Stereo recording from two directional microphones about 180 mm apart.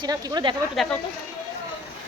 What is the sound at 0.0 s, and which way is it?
Speech, 20° right (ahead or behind).